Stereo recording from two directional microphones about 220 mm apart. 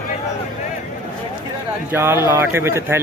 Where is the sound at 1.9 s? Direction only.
10° right (ahead or behind).